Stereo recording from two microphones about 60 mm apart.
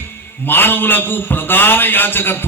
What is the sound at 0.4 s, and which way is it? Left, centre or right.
A man's voice, left.